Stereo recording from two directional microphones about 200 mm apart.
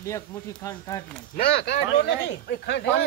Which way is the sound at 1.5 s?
55° left (ahead or behind).